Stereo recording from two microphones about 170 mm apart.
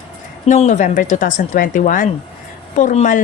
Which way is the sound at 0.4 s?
45° left (ahead or behind).